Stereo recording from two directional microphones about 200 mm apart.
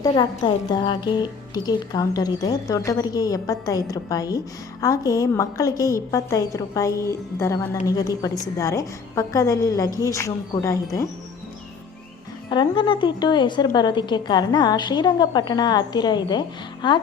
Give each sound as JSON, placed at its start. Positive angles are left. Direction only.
{"t": 0.0, "sound": "a woman's voice", "side_deg": 20}
{"t": 12.5, "sound": "a woman's voice", "side_deg": 25}